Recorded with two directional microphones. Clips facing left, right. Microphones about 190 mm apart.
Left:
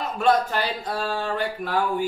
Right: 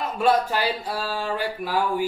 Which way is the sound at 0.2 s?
10° right (ahead or behind).